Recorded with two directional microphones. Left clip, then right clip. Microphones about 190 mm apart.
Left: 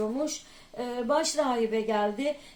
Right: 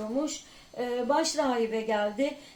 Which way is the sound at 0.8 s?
35° left (ahead or behind).